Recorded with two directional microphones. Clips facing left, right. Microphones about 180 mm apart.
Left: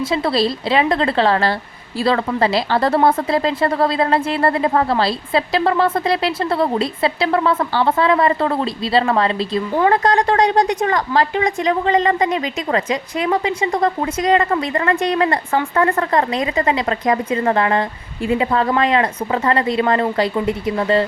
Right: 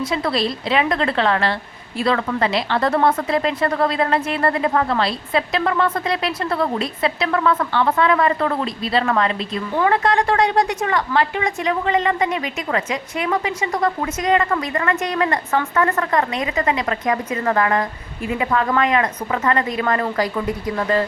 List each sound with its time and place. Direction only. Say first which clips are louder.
0.0 s speech: left 3 dB; 30° left (ahead or behind)